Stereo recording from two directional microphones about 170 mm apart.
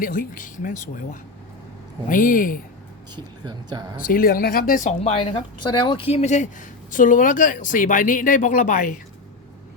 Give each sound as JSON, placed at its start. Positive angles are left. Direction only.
{"t": 0.0, "sound": "speech", "side_deg": 55}
{"t": 3.2, "sound": "speech", "side_deg": -25}
{"t": 4.0, "sound": "speech", "side_deg": 55}